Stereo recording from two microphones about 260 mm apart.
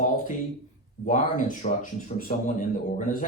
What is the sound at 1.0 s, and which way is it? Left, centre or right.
A man's voice, left.